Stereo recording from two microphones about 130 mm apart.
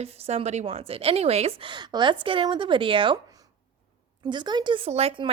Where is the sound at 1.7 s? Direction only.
35° right (ahead or behind).